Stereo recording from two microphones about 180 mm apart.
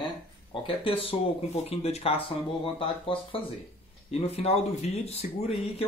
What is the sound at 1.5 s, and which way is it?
Speech, 35° left (ahead or behind).